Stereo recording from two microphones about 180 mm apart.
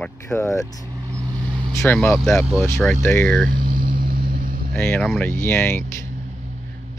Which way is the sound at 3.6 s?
50° right (ahead or behind).